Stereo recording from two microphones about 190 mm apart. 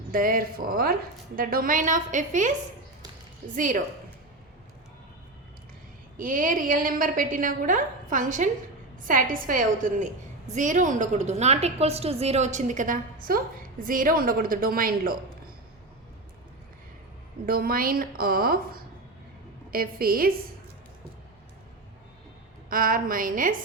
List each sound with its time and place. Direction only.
0.1 s a woman's voice: 50° right (ahead or behind)
3.5 s a woman's voice: 45° right (ahead or behind)
6.1 s a woman's voice: 45° right (ahead or behind)
17.4 s a woman's voice: 50° right (ahead or behind)
22.7 s a woman's voice: 50° right (ahead or behind)